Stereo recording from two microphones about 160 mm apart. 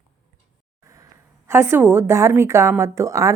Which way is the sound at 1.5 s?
15° right (ahead or behind).